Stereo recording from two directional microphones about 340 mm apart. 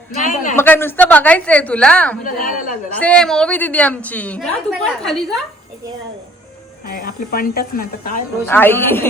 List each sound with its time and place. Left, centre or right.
0.2 s a woman's voice: left
0.5 s a woman's voice: centre
2.2 s a woman's voice: left
3.0 s a woman's voice: centre
6.8 s a woman's voice: left
8.4 s a woman's voice: centre